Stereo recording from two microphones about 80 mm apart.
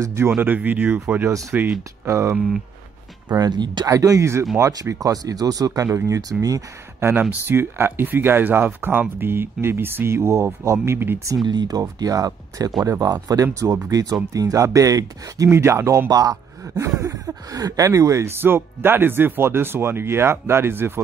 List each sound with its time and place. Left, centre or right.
0.0 s speech: right
0.4 s speech: right
2.3 s speech: centre
3.3 s speech: right
3.9 s speech: right
7.0 s speech: right
11.4 s speech: right
11.8 s speech: right
15.5 s speech: right
16.1 s speech: right
16.6 s speech: right
18.4 s speech: right